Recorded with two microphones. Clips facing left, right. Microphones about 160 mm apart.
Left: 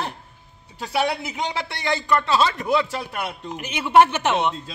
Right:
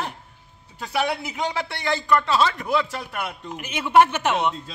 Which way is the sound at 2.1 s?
25° left (ahead or behind).